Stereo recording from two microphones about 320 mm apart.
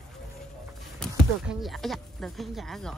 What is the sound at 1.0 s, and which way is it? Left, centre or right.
Speech, centre.